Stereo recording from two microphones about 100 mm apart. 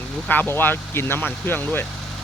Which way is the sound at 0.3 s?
20° left (ahead or behind).